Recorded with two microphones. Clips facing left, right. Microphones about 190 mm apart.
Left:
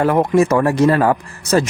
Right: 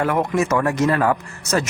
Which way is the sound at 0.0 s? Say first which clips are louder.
Left 6 dB; 35° left (ahead or behind).